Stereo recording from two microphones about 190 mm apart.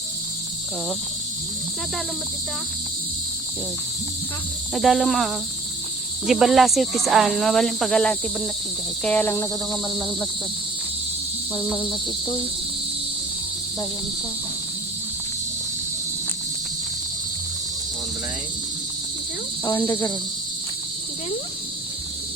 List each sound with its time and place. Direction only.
4.7 s speech: centre (ahead or behind)
9.0 s cricket: 10° left (ahead or behind)
11.5 s cricket: 10° left (ahead or behind)
11.9 s cricket: 25° left (ahead or behind)
19.6 s cricket: 15° left (ahead or behind)